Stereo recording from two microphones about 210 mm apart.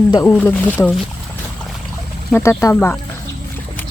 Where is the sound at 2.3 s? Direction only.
10° left (ahead or behind).